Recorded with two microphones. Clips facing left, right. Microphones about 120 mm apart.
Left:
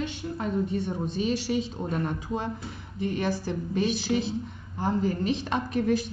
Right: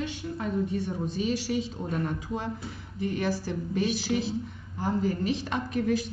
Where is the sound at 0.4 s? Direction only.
25° left (ahead or behind).